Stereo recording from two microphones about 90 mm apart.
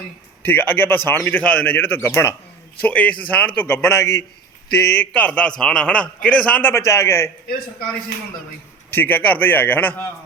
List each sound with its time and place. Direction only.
0.4 s a man's voice: 20° left (ahead or behind)
2.8 s a man's voice: 15° left (ahead or behind)
4.9 s a man's voice: 15° left (ahead or behind)
6.7 s a man's voice: 30° left (ahead or behind)
8.9 s a man's voice: 20° left (ahead or behind)